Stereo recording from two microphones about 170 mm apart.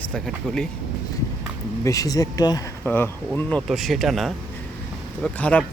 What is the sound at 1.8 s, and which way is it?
Speech, 20° left (ahead or behind).